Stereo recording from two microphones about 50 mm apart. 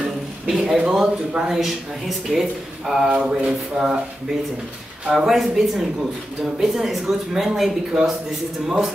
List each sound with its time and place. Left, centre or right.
0.5 s speech: centre
3.1 s speech: right
3.4 s speech: centre
5.0 s speech: centre